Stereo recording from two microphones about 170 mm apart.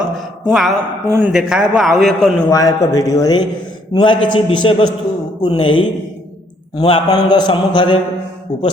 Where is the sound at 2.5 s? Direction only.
20° left (ahead or behind).